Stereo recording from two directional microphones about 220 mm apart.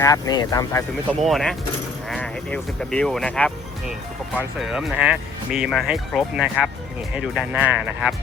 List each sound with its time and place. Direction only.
0.0 s speech: 15° left (ahead or behind)
1.2 s speech: centre (ahead or behind)